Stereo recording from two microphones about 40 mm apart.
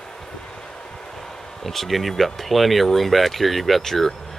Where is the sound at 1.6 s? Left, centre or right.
Centre.